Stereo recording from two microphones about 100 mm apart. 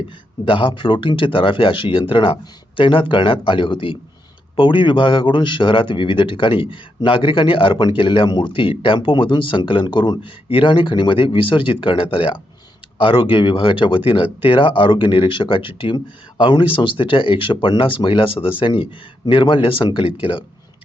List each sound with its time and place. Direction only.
0.4 s speech: 55° left (ahead or behind)